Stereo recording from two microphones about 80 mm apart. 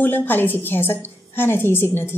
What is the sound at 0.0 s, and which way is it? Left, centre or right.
A woman's voice, left.